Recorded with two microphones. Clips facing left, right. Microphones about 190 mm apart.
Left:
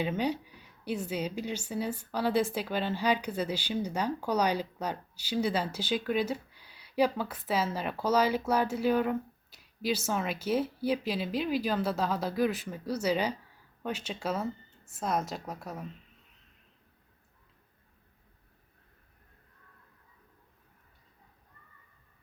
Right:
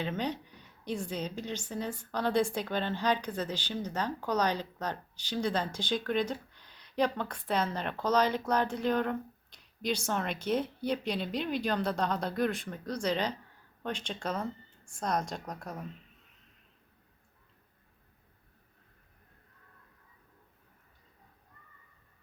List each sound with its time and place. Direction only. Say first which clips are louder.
0.0 s a woman's voice: left 3 dB; 10° left (ahead or behind)